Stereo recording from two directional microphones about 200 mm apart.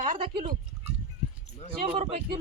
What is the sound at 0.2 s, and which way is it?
Speech, 30° right (ahead or behind).